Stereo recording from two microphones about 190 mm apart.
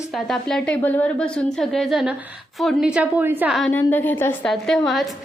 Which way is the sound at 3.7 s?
10° left (ahead or behind).